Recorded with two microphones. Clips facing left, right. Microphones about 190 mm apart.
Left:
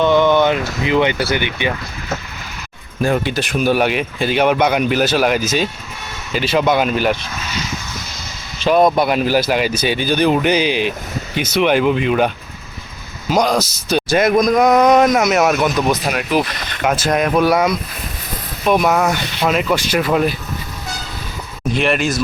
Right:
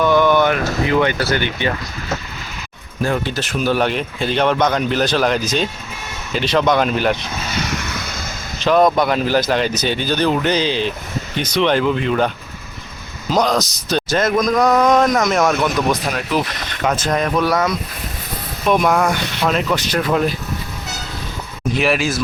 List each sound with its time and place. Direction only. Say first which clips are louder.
0.0 s speech: left 1 dB; 20° left (ahead or behind)
3.0 s a man's voice: left 3 dB; 15° left (ahead or behind)
7.6 s a sound: right 3 dB; 70° right (ahead or behind)
8.6 s a man's voice: left 1 dB; 10° left (ahead or behind)
13.3 s a man's voice: left 1 dB; 10° left (ahead or behind)
18.7 s speech: left 1 dB; 5° left (ahead or behind)
21.8 s speech: left 1 dB; centre (ahead or behind)